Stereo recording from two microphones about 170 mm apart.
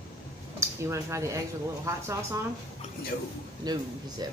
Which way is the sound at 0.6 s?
15° right (ahead or behind).